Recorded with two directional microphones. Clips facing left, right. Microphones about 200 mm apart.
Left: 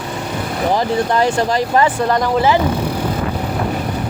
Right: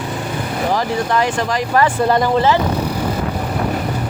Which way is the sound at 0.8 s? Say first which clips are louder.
Left 2 dB; 30° left (ahead or behind).